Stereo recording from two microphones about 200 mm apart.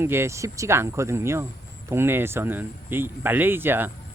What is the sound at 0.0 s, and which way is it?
Speech, 10° right (ahead or behind).